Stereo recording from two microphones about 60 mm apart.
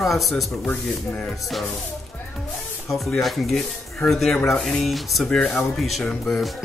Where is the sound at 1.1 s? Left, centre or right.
Centre.